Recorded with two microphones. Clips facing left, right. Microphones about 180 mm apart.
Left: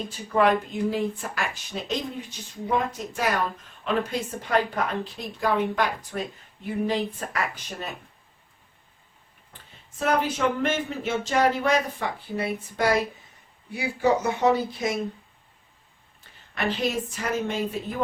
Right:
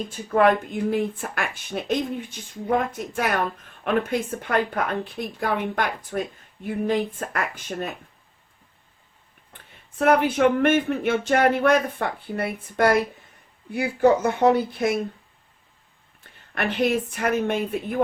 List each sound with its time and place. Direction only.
0.3 s speech: 50° right (ahead or behind)
10.0 s speech: 60° right (ahead or behind)
16.6 s speech: 60° right (ahead or behind)